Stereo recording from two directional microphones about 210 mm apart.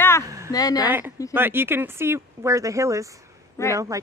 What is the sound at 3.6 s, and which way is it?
Speech, 15° left (ahead or behind).